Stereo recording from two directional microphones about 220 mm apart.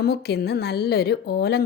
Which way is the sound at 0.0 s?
45° left (ahead or behind).